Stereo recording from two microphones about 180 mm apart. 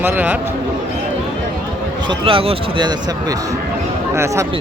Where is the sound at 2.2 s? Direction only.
30° right (ahead or behind).